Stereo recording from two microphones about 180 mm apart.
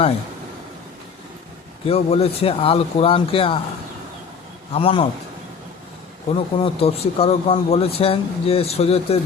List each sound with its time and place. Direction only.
1.9 s speech: 35° left (ahead or behind)
4.7 s speech: 30° left (ahead or behind)
6.3 s speech: 35° left (ahead or behind)